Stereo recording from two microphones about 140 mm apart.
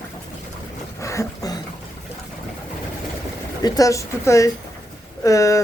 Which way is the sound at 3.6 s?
25° left (ahead or behind).